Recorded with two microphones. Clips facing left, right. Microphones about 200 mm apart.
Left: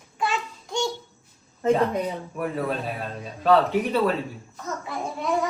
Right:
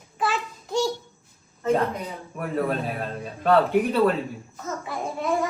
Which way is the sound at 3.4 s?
Centre (ahead or behind).